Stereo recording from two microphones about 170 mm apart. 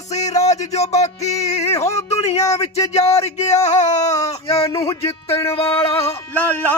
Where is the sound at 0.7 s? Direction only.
40° left (ahead or behind).